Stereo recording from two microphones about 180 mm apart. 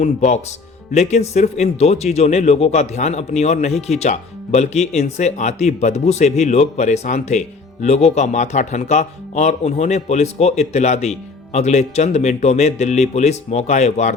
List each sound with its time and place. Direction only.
0.0 s speech: 40° left (ahead or behind)